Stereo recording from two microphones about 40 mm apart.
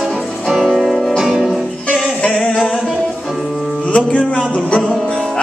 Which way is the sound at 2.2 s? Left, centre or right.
Centre.